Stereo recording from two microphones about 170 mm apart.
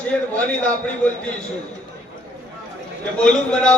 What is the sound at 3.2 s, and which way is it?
Speech, 5° left (ahead or behind).